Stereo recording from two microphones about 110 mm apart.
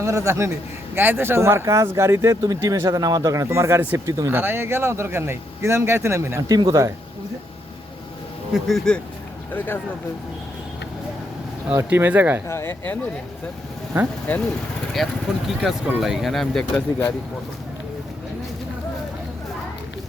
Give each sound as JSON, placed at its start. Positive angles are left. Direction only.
{"t": 0.0, "sound": "a man's voice", "side_deg": -25}
{"t": 8.5, "sound": "speech", "side_deg": 0}
{"t": 9.5, "sound": "speech", "side_deg": 20}
{"t": 11.7, "sound": "speech", "side_deg": -25}
{"t": 12.5, "sound": "speech", "side_deg": 25}
{"t": 15.0, "sound": "speech", "side_deg": 0}